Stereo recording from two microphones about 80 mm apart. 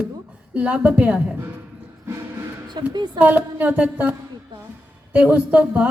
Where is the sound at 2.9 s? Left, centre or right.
Right.